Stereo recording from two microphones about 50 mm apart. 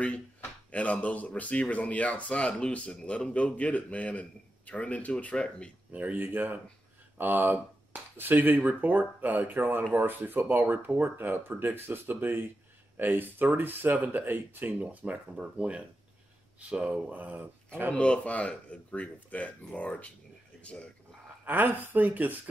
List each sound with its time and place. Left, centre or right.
0.0 s speech: left
5.9 s speech: right
17.6 s speech: right
17.9 s speech: left
21.5 s speech: right